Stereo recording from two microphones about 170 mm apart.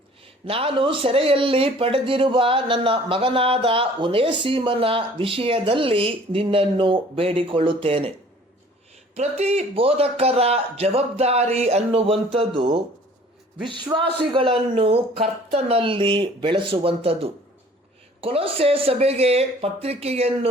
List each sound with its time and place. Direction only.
0.4 s speech: 35° right (ahead or behind)
9.1 s speech: 40° right (ahead or behind)